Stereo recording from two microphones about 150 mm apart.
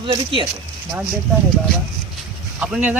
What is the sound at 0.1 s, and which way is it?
Speech, 35° right (ahead or behind).